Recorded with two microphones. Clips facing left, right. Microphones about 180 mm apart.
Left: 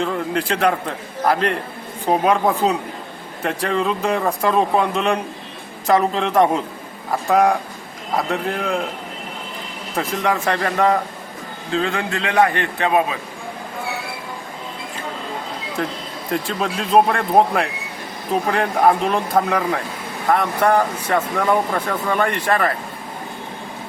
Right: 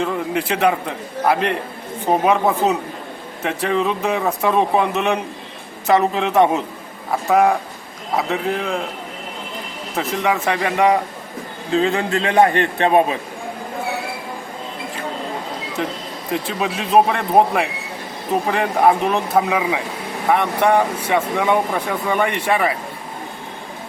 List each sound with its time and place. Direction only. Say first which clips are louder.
0.0 s speech: even; 5° right (ahead or behind)
9.9 s speech: right 1 dB; 5° right (ahead or behind)
11.8 s a man's voice: right 4 dB; 25° right (ahead or behind)
16.3 s speech: even; 5° right (ahead or behind)